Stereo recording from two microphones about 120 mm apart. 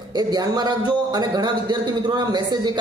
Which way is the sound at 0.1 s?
35° right (ahead or behind).